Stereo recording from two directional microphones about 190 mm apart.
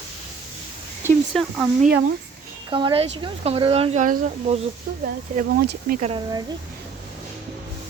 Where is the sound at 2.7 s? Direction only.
25° right (ahead or behind).